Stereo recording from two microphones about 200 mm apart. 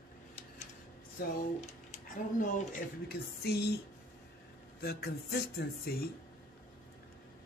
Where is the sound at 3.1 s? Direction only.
55° left (ahead or behind).